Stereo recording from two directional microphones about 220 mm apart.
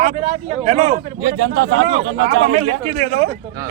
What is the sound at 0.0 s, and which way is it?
A man's voice, 30° right (ahead or behind).